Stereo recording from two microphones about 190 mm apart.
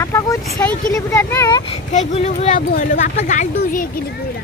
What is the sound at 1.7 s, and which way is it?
Speech, 35° left (ahead or behind).